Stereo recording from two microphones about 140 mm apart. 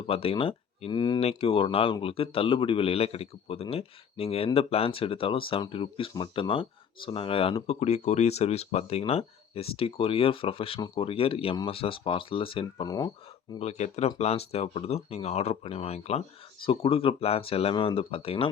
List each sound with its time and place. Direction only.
0.1 s a man's voice: 45° left (ahead or behind)
1.2 s a man's voice: 45° left (ahead or behind)
7.7 s speech: 50° left (ahead or behind)
10.8 s speech: 30° left (ahead or behind)
11.0 s a man's voice: 40° left (ahead or behind)
13.6 s a man's voice: 50° left (ahead or behind)